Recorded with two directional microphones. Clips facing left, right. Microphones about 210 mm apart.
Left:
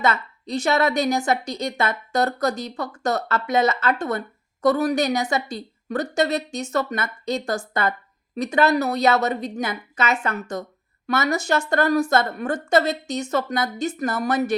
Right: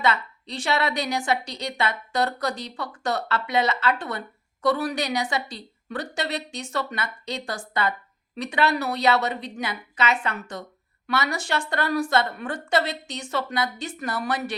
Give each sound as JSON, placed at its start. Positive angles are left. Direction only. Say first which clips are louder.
{"t": 0.0, "sound": "speech", "louder": "left 2 dB", "side_deg": 45}